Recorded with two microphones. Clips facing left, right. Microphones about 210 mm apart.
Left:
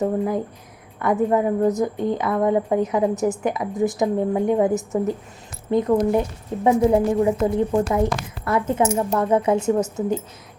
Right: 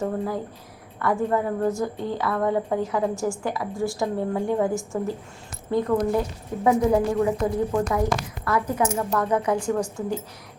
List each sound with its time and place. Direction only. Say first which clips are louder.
0.0 s a woman's voice: left 5 dB; 20° left (ahead or behind)